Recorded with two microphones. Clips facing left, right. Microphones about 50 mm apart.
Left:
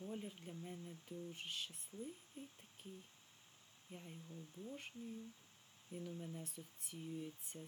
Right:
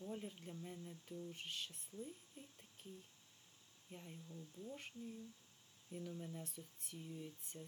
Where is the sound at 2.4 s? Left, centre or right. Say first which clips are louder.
Left 4 dB; centre.